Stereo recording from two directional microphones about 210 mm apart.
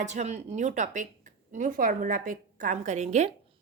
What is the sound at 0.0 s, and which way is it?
A woman's voice, 35° right (ahead or behind).